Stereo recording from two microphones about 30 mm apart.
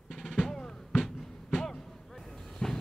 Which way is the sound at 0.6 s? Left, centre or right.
Left.